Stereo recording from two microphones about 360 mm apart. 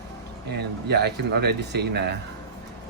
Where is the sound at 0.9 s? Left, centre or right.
Right.